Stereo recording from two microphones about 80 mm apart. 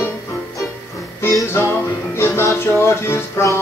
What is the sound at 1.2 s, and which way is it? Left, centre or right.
Music, left.